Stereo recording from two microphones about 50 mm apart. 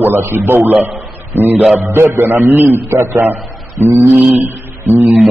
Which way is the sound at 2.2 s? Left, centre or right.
Right.